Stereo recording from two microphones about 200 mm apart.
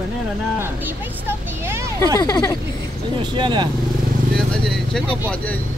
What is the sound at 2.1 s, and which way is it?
Speech, 15° left (ahead or behind).